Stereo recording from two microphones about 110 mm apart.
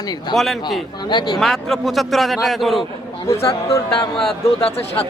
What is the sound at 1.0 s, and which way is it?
Speech, 40° left (ahead or behind).